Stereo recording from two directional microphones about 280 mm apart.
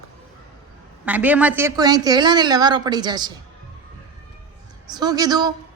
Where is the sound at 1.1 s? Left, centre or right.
Centre.